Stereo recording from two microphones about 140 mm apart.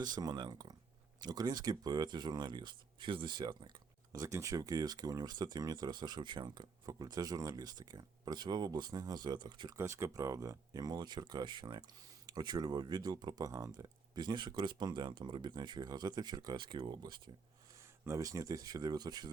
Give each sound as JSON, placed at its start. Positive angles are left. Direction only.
{"t": 0.2, "sound": "speech", "side_deg": -30}
{"t": 9.7, "sound": "speech", "side_deg": -20}